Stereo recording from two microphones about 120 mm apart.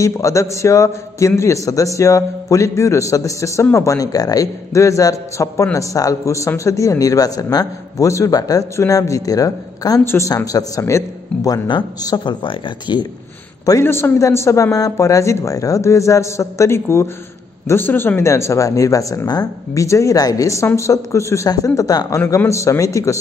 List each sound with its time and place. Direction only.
0.0 s a man's voice: 25° left (ahead or behind); by 13.0 s 40° left (ahead or behind)
13.7 s a man's voice: 20° left (ahead or behind)